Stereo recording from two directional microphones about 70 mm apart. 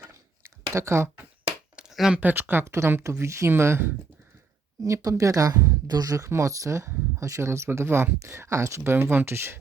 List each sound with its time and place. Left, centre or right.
0.7 s speech: right
1.9 s a sound: centre
2.1 s speech: right
4.8 s speech: right